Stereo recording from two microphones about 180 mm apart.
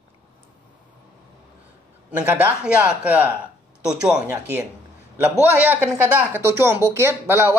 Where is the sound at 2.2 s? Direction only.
10° right (ahead or behind).